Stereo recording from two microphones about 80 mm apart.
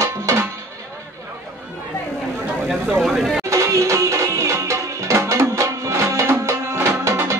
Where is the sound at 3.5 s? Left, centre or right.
Right.